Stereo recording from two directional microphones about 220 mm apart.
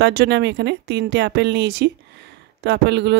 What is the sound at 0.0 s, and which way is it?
Speech, 50° right (ahead or behind).